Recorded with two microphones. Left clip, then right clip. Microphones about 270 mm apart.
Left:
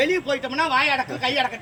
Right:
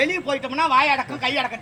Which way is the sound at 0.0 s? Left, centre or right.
Centre.